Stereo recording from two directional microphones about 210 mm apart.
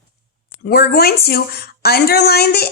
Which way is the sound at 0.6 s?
45° left (ahead or behind).